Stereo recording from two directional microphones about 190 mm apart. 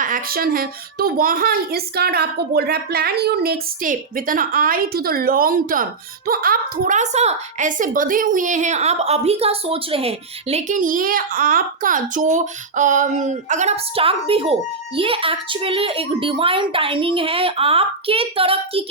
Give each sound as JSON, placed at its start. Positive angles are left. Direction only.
{"t": 0.0, "sound": "a child's voice", "side_deg": -50}